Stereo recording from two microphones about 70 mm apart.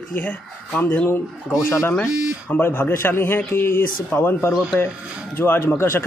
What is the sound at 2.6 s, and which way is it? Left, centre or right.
A man's voice, left.